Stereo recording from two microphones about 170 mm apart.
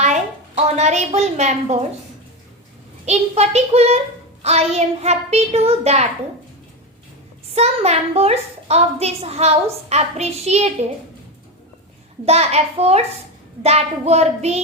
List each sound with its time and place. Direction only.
0.0 s a woman's voice: 45° right (ahead or behind)
3.1 s a woman's voice: 40° right (ahead or behind)
7.5 s a woman's voice: 40° right (ahead or behind)
12.2 s a woman's voice: 40° right (ahead or behind)